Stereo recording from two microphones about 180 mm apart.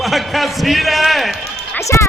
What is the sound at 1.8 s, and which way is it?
Music, 15° left (ahead or behind).